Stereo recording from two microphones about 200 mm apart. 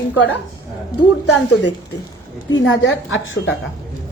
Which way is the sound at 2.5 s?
65° left (ahead or behind).